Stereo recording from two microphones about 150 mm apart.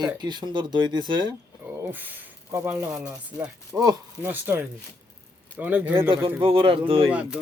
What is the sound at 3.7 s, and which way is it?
Speech, 20° right (ahead or behind).